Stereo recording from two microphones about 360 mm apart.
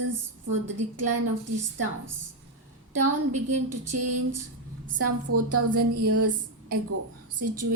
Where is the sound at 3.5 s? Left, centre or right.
Right.